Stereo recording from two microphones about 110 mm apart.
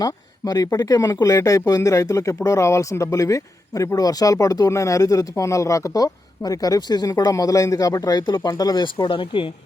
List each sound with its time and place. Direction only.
0.0 s speech: 35° left (ahead or behind)